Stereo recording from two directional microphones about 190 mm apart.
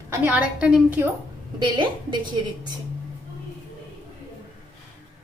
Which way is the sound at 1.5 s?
25° right (ahead or behind).